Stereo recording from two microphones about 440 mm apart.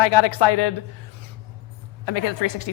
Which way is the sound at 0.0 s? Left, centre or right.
Left.